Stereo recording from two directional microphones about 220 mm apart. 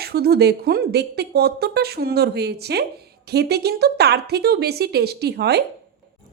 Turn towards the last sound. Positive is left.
turn(degrees=-50)  # may be behind; listen again after turning